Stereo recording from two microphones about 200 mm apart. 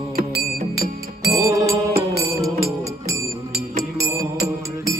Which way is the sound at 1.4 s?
15° right (ahead or behind).